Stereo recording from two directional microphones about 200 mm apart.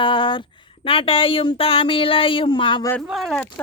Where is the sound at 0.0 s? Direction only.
25° left (ahead or behind).